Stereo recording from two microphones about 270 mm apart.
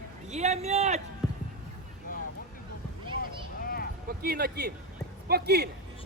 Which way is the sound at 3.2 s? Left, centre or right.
Left.